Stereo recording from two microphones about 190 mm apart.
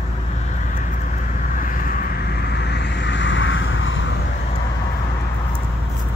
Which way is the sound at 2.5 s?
60° left (ahead or behind).